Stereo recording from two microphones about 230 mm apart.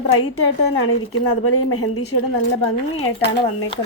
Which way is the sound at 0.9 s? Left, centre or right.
Left.